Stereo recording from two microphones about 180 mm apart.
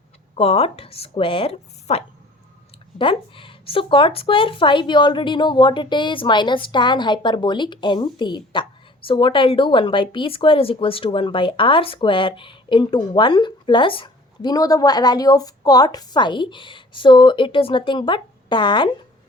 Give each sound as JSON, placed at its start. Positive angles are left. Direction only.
{"t": 0.3, "sound": "speech", "side_deg": 35}